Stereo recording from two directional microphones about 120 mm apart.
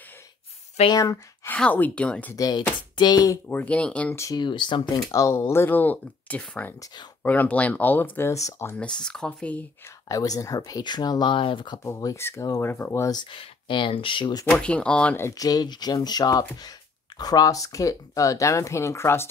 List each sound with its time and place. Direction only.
0.8 s speech: 30° left (ahead or behind)
1.5 s speech: 15° left (ahead or behind)
2.3 s speech: 35° left (ahead or behind)
3.4 s speech: 10° left (ahead or behind)
4.1 s speech: 25° left (ahead or behind)
4.4 s speech: 40° left (ahead or behind)
5.1 s speech: 25° left (ahead or behind)
9.0 s speech: 5° left (ahead or behind)
10.0 s speech: 30° left (ahead or behind)
11.8 s speech: 25° left (ahead or behind)
13.1 s speech: 40° left (ahead or behind)
14.5 s speech: 10° left (ahead or behind)
15.1 s speech: 25° left (ahead or behind)